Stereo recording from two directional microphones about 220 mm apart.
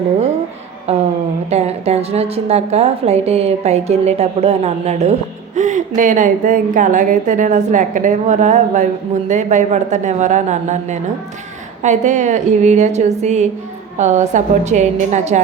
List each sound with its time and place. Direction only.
0.9 s a woman's voice: 30° right (ahead or behind)